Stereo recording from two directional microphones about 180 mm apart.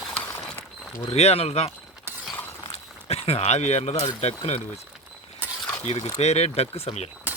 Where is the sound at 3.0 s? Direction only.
35° left (ahead or behind).